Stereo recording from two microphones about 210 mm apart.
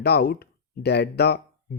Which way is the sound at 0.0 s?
50° left (ahead or behind).